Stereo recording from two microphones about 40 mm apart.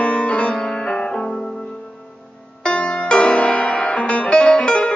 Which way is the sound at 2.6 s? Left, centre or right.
Left.